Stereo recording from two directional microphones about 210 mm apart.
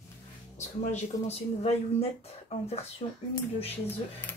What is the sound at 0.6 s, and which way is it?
Speech, 30° left (ahead or behind).